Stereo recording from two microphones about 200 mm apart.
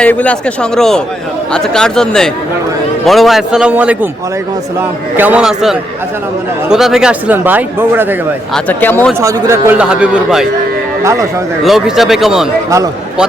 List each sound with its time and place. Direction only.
0.0 s a man's voice: 5° left (ahead or behind); by 8.0 s 10° right (ahead or behind)
8.5 s speech: 10° left (ahead or behind)
9.2 s a man's voice: 10° right (ahead or behind)
11.0 s speech: 15° right (ahead or behind)
11.6 s a man's voice: centre (ahead or behind)